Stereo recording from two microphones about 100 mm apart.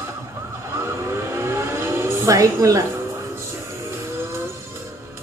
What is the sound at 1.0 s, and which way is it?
Vehicle, 25° right (ahead or behind).